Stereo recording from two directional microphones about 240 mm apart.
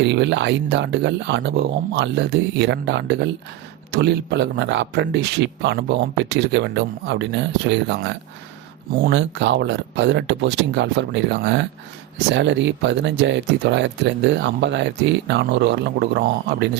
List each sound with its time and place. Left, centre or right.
0.0 s speech: right